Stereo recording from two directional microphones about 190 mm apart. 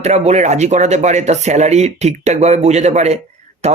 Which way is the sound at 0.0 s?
35° right (ahead or behind).